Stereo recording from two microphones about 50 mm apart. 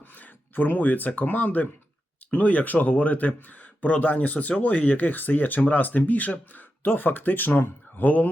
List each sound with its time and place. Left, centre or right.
0.1 s speech: left